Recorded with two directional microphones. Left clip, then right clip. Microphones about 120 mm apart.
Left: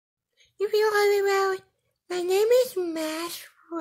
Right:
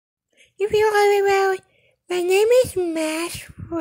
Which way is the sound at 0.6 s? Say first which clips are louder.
Right 5 dB; 25° right (ahead or behind).